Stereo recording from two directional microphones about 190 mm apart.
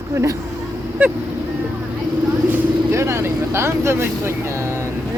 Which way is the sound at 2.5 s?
10° right (ahead or behind).